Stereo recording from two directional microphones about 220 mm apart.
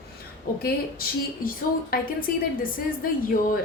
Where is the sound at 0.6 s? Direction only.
45° left (ahead or behind).